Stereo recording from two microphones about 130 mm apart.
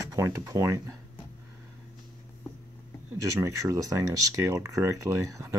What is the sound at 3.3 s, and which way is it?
Speech, 25° right (ahead or behind).